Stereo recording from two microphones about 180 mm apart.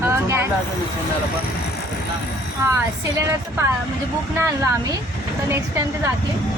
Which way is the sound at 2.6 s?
15° right (ahead or behind).